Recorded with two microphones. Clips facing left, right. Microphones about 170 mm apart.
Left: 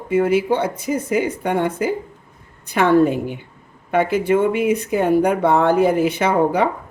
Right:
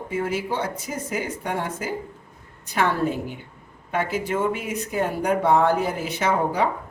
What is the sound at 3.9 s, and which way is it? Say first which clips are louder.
Speech: left 8 dB; 60° left (ahead or behind).